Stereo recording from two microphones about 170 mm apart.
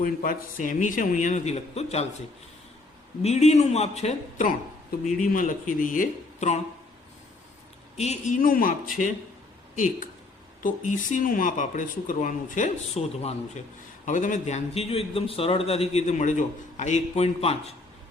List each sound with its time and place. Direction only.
0.0 s speech: 55° left (ahead or behind); by 2.0 s 40° left (ahead or behind)
3.2 s a man's voice: 40° left (ahead or behind)
7.9 s a man's voice: 40° left (ahead or behind)